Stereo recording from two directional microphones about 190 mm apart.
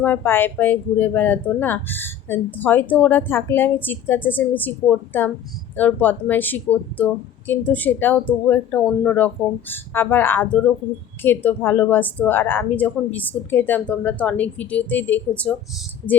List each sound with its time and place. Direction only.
0.0 s speech: 10° left (ahead or behind)